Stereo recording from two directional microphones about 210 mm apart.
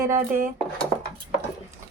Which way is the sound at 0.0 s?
15° right (ahead or behind).